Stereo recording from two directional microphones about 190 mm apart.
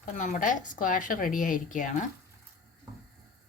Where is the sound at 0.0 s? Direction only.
40° left (ahead or behind).